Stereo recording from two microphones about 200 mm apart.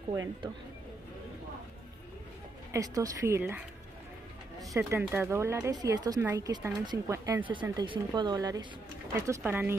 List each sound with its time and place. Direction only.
0.1 s speech: 15° right (ahead or behind)
2.7 s speech: 15° right (ahead or behind)
4.7 s speech: 10° right (ahead or behind)